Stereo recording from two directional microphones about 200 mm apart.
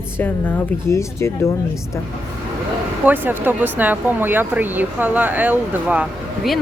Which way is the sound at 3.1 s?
10° right (ahead or behind).